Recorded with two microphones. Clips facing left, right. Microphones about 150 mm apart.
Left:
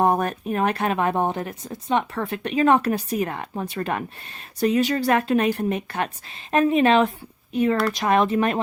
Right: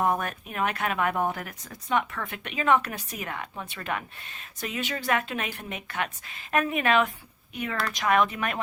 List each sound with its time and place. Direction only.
0.0 s speech: 35° left (ahead or behind)